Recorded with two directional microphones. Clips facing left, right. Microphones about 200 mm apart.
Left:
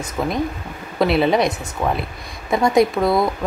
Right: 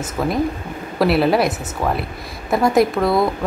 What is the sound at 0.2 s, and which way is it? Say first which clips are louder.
Speech: right 2 dB; centre (ahead or behind).